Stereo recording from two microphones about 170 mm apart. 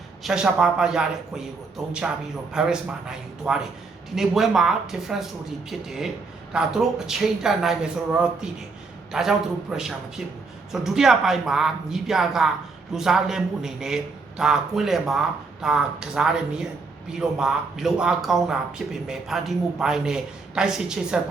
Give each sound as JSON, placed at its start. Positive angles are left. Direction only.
{"t": 0.2, "sound": "a man's voice", "side_deg": -5}
{"t": 2.5, "sound": "a man's voice", "side_deg": -5}
{"t": 6.5, "sound": "a man's voice", "side_deg": -5}